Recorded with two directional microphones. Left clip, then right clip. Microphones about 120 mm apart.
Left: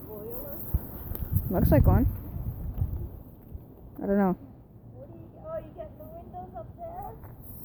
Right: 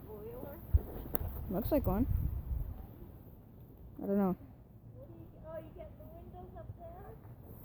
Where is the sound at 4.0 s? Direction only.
5° right (ahead or behind).